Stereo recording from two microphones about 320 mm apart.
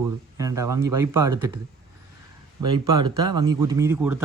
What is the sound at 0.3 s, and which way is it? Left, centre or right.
Speech, centre.